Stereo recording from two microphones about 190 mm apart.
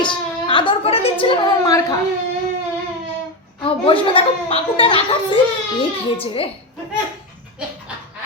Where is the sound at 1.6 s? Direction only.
15° left (ahead or behind).